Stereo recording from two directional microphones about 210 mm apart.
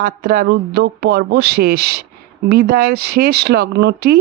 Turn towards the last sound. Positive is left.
turn(degrees=-50)  # may be behind; listen again after turning